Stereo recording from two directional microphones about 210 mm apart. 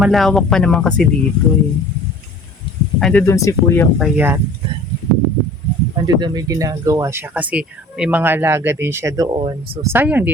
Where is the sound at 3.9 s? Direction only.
5° right (ahead or behind).